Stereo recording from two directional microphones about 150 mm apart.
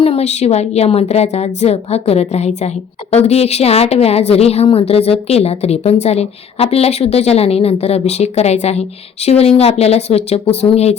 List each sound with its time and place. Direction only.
0.0 s a woman's voice: 45° left (ahead or behind)